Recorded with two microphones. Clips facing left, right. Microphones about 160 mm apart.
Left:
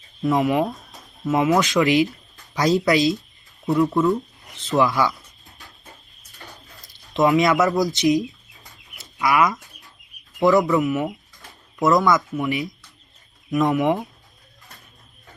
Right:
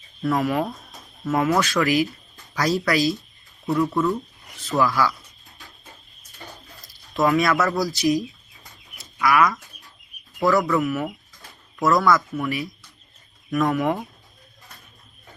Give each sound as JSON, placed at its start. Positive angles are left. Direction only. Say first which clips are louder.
{"t": 0.2, "sound": "speech", "louder": "left 3 dB", "side_deg": 20}
{"t": 7.1, "sound": "speech", "louder": "left 2 dB", "side_deg": 20}
{"t": 8.2, "sound": "chicken", "louder": "left 3 dB", "side_deg": 0}
{"t": 9.1, "sound": "speech", "louder": "even", "side_deg": 20}